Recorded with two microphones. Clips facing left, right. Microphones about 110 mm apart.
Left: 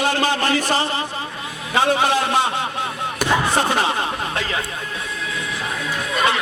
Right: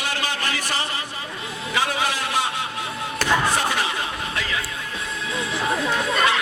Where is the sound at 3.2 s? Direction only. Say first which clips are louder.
Left 2 dB; 10° left (ahead or behind).